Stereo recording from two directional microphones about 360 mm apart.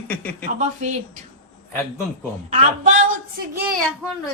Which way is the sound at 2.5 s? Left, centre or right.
Centre.